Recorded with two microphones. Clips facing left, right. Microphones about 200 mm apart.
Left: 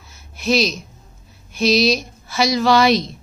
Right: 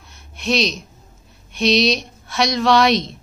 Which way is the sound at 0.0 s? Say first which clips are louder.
Left 2 dB; centre (ahead or behind).